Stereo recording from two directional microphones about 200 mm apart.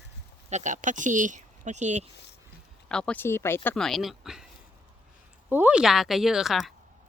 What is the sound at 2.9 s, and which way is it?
Speech, 5° left (ahead or behind).